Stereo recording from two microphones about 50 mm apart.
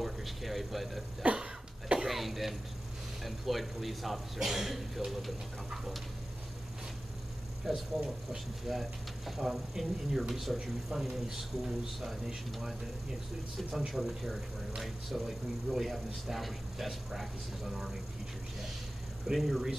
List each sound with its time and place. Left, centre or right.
0.0 s speech: centre
1.2 s cough: right
2.0 s a man's voice: centre
7.7 s a man's voice: centre
19.2 s a man's voice: centre